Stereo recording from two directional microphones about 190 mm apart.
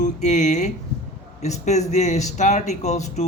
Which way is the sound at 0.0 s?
40° left (ahead or behind).